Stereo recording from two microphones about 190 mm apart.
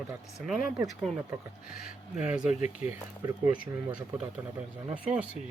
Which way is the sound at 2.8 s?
20° right (ahead or behind).